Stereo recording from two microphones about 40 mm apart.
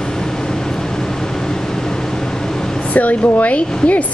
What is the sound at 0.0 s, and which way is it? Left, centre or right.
Vehicle, centre.